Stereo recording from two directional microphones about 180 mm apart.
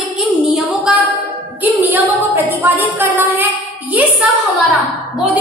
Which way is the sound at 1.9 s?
10° right (ahead or behind).